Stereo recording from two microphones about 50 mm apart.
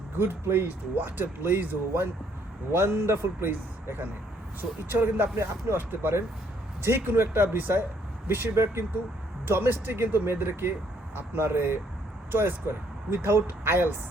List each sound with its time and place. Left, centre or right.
0.2 s a man's voice: right